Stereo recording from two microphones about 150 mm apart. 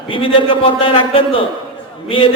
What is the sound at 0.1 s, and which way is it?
A man's voice, 35° left (ahead or behind).